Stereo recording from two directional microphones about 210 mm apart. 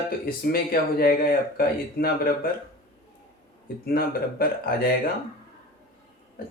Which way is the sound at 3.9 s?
45° left (ahead or behind).